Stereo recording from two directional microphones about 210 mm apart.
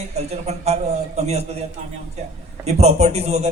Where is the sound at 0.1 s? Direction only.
30° right (ahead or behind).